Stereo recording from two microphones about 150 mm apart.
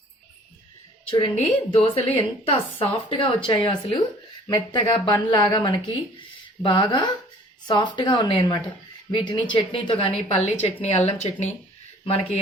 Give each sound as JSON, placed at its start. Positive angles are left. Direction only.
{"t": 1.1, "sound": "a woman's voice", "side_deg": 35}